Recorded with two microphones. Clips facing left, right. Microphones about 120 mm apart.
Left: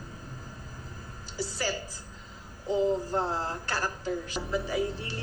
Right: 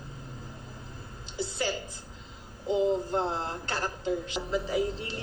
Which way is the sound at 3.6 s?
25° right (ahead or behind).